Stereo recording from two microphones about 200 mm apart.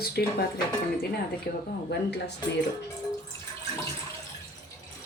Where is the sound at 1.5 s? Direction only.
50° left (ahead or behind).